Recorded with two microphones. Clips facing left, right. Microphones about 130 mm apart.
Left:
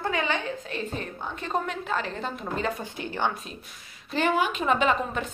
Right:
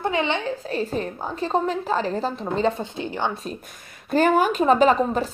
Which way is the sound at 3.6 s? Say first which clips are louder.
Right 5 dB; 50° right (ahead or behind).